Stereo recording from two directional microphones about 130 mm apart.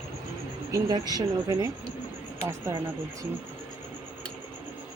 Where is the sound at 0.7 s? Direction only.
30° right (ahead or behind).